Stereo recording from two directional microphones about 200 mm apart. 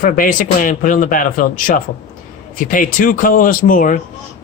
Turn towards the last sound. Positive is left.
turn(degrees=45)  # may be behind; listen again after turning